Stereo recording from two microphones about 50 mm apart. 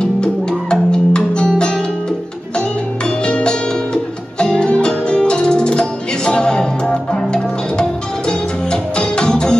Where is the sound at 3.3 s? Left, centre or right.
Centre.